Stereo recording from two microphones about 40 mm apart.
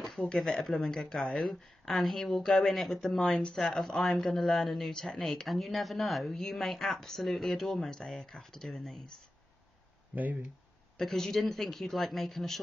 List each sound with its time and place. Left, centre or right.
0.5 s a woman's voice: centre
2.4 s a woman's voice: centre
2.7 s a woman's voice: centre
10.1 s speech: right
11.0 s speech: centre